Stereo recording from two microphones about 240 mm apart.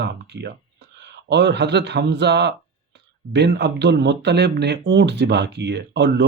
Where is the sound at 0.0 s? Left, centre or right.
Right.